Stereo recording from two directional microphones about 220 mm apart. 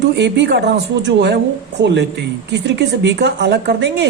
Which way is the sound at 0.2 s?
50° right (ahead or behind).